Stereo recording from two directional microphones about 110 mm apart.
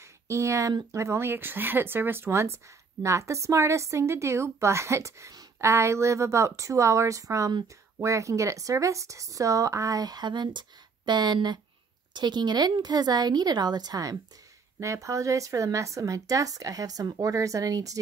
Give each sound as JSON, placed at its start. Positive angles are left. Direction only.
{"t": 0.0, "sound": "a woman's voice", "side_deg": -30}